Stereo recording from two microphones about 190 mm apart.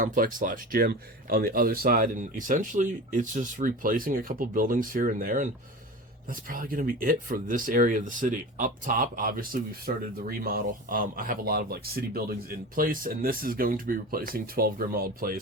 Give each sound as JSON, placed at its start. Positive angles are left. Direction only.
{"t": 0.0, "sound": "speech", "side_deg": -45}